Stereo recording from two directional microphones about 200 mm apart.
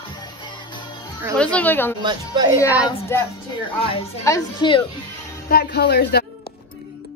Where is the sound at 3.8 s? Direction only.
30° left (ahead or behind).